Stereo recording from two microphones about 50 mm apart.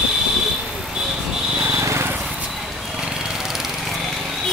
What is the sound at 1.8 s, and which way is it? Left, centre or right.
Vehicle, right.